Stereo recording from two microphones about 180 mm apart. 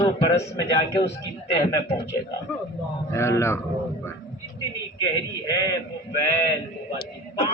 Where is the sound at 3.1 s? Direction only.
15° left (ahead or behind).